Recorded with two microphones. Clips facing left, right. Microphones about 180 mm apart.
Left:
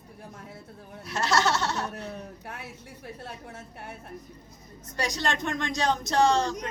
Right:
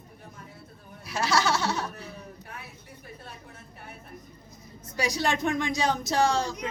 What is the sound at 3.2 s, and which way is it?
Speech, 75° left (ahead or behind).